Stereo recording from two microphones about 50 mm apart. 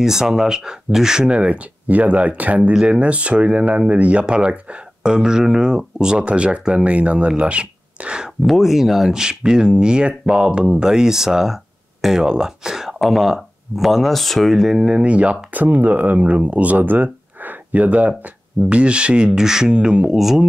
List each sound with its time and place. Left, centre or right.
0.0 s speech: centre
8.5 s speech: centre
15.0 s speech: right
20.2 s speech: centre